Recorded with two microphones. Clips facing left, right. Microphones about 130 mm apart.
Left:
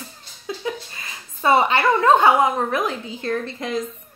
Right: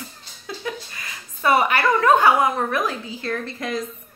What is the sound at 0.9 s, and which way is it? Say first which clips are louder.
A woman's voice: even; 25° left (ahead or behind).